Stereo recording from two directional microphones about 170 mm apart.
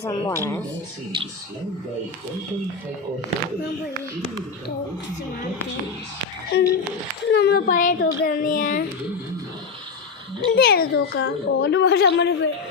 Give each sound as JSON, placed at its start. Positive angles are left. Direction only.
{"t": 0.0, "sound": "speech", "side_deg": 20}
{"t": 6.5, "sound": "a woman's voice", "side_deg": 70}
{"t": 10.5, "sound": "a woman's voice", "side_deg": 65}